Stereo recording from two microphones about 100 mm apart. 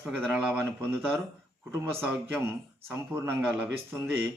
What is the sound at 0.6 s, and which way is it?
Speech, 25° right (ahead or behind).